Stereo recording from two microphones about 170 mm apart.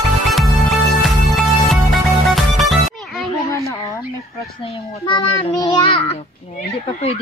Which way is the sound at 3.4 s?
20° left (ahead or behind).